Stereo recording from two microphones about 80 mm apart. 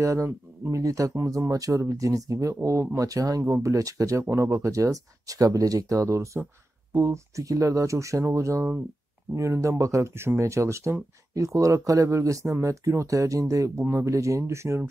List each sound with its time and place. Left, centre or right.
0.0 s speech: right